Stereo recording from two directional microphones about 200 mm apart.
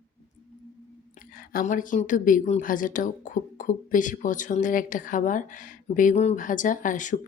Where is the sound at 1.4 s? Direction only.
40° left (ahead or behind).